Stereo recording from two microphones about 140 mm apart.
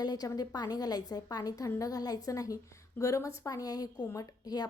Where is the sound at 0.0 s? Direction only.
30° left (ahead or behind).